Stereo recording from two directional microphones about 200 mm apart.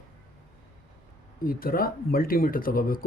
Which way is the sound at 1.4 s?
45° left (ahead or behind).